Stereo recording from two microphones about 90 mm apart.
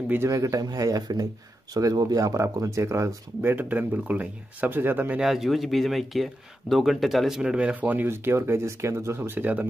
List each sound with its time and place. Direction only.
0.3 s speech: 40° right (ahead or behind); by 5.2 s 20° right (ahead or behind)
5.2 s speech: 5° right (ahead or behind); by 9.7 s 20° right (ahead or behind)